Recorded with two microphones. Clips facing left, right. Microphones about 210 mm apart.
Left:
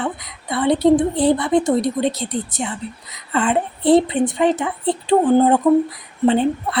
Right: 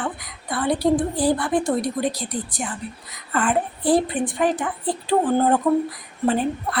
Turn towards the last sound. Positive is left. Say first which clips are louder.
# left 5 dB
turn(degrees=25)  # may be behind; listen again after turning